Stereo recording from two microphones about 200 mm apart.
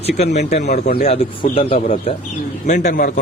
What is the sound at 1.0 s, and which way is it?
Speech, 30° left (ahead or behind).